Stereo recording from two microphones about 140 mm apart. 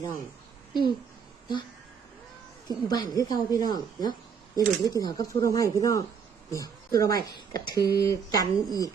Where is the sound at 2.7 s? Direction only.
30° left (ahead or behind).